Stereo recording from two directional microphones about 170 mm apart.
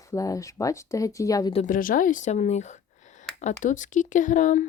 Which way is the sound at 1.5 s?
50° left (ahead or behind).